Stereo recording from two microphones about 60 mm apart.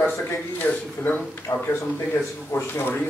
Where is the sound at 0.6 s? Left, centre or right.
Left.